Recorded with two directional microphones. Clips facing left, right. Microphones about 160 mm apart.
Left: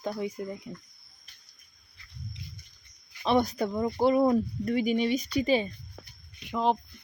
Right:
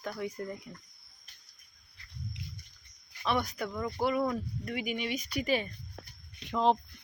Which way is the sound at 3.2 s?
30° left (ahead or behind).